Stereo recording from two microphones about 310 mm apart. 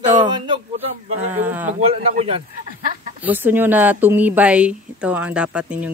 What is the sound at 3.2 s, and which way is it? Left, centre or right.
Speech, centre.